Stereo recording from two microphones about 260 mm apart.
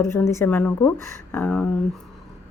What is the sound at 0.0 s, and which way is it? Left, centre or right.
Speech, centre.